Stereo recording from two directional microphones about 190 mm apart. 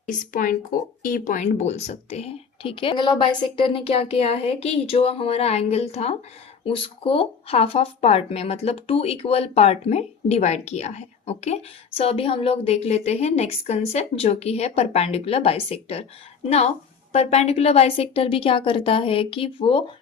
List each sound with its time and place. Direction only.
0.1 s a woman's voice: 45° left (ahead or behind); by 19.8 s 30° left (ahead or behind)